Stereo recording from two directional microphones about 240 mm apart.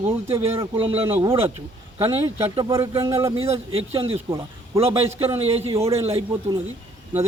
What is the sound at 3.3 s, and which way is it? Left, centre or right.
A man's voice, right.